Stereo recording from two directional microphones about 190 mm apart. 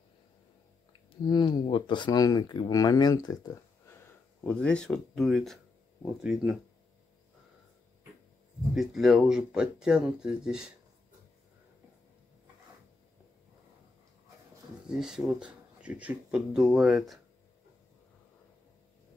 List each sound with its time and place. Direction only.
1.2 s speech: 20° left (ahead or behind)
3.9 s speech: 5° left (ahead or behind)
8.7 s speech: centre (ahead or behind)
14.9 s speech: 5° right (ahead or behind)